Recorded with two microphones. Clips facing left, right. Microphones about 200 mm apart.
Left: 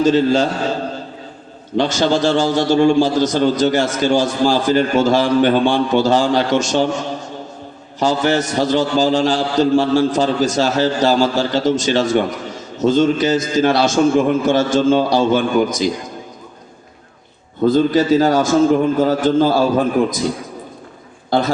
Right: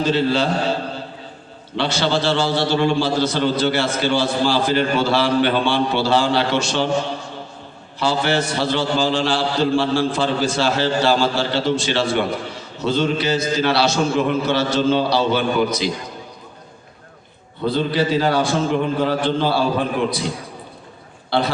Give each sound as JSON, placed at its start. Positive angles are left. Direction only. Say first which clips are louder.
{"t": 0.0, "sound": "a man's voice", "louder": "left 5 dB", "side_deg": 45}
{"t": 17.7, "sound": "a man's voice", "louder": "left 6 dB", "side_deg": 45}
{"t": 21.2, "sound": "a man's voice", "louder": "left 3 dB", "side_deg": 45}